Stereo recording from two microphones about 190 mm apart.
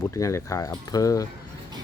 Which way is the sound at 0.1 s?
15° left (ahead or behind).